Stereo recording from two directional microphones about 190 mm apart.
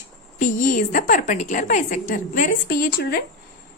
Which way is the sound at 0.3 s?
45° left (ahead or behind).